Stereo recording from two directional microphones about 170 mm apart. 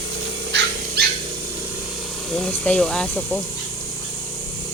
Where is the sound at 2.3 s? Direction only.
5° left (ahead or behind).